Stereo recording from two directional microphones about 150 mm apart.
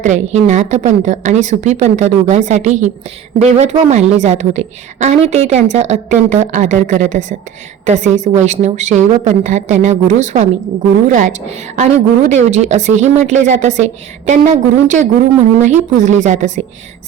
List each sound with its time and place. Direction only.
0.0 s a woman's voice: 50° right (ahead or behind)